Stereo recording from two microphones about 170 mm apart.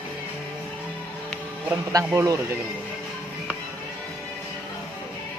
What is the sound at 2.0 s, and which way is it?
Speech, 15° right (ahead or behind).